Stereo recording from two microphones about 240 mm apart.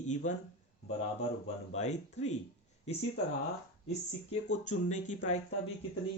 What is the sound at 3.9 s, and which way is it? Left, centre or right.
Speech, left.